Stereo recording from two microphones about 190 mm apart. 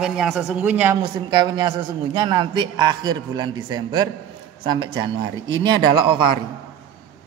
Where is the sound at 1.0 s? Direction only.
25° right (ahead or behind).